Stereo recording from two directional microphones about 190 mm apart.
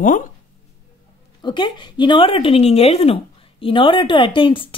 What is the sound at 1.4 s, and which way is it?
A woman's voice, 25° left (ahead or behind).